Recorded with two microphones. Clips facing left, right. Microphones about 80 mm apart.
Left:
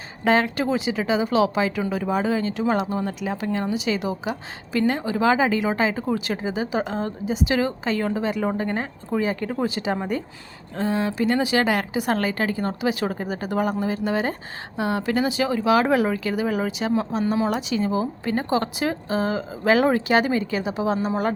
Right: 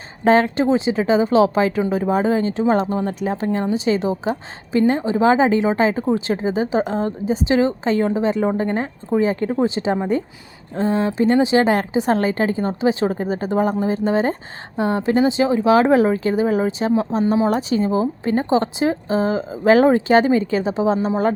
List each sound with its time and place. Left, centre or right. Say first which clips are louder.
0.3 s a woman's voice: right 5 dB; right